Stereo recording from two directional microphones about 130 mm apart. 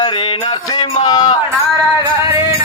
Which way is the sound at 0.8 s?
30° left (ahead or behind).